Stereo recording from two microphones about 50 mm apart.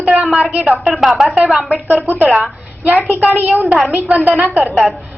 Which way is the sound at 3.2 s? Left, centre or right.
Right.